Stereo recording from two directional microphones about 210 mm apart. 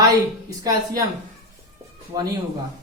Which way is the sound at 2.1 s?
20° right (ahead or behind).